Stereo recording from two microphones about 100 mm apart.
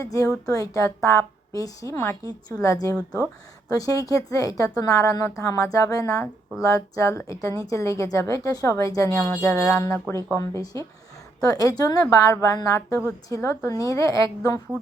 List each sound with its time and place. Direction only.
0.0 s a woman's voice: 35° left (ahead or behind)
9.1 s speech: 25° left (ahead or behind)
9.8 s a woman's voice: 30° left (ahead or behind)